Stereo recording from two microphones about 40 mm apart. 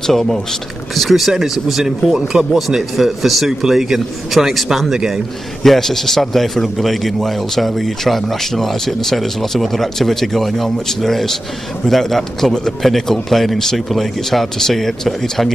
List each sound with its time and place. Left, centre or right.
0.0 s a man's voice: centre
5.6 s a man's voice: centre